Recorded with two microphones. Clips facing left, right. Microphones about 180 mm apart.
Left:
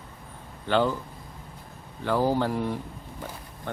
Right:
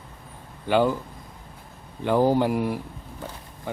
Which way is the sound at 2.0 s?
15° right (ahead or behind).